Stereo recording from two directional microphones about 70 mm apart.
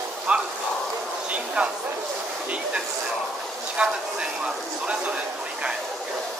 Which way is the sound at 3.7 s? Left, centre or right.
Centre.